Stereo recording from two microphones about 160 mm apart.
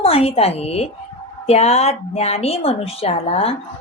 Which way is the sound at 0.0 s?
35° left (ahead or behind).